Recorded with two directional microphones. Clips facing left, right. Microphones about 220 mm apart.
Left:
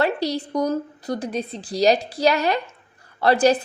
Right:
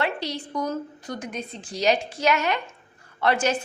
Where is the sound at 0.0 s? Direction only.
40° left (ahead or behind).